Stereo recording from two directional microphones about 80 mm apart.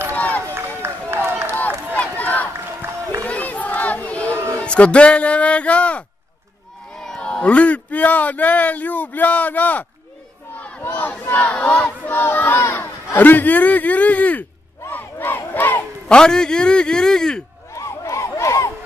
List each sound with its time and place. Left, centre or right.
0.1 s run: centre
1.1 s run: right
2.0 s run: centre
3.2 s crowd: centre
4.6 s speech: centre
10.6 s battle cry: left
11.8 s speech: left
14.9 s crowd: left
16.1 s a man's voice: centre
17.7 s a sound: left